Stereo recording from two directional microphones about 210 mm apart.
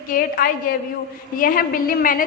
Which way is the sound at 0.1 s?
45° left (ahead or behind).